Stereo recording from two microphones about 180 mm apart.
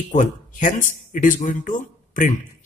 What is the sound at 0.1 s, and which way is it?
Speech, 45° left (ahead or behind).